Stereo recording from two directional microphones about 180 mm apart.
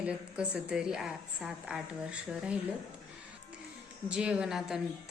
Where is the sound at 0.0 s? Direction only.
5° right (ahead or behind).